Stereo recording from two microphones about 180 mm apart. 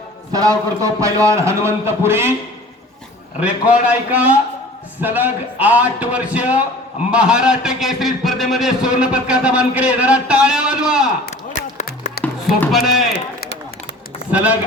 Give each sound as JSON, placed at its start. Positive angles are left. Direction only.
{"t": 0.3, "sound": "a man's voice", "side_deg": -20}
{"t": 3.4, "sound": "a man's voice", "side_deg": -10}
{"t": 11.6, "sound": "a sound", "side_deg": -50}
{"t": 12.2, "sound": "chop", "side_deg": 5}
{"t": 14.3, "sound": "a man's voice", "side_deg": -10}